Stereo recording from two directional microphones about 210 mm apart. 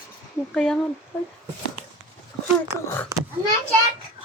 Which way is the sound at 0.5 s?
5° left (ahead or behind).